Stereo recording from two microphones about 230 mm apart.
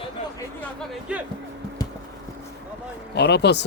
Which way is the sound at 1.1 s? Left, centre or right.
Centre.